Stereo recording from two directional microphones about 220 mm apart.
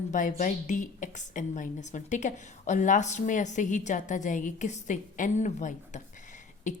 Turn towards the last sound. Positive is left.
turn(degrees=35)  # may be behind; listen again after turning